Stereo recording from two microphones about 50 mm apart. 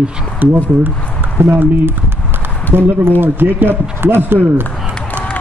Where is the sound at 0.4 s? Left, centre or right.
Right.